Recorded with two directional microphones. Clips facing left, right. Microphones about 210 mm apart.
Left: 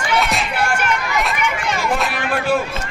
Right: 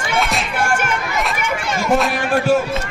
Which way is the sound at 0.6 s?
50° right (ahead or behind).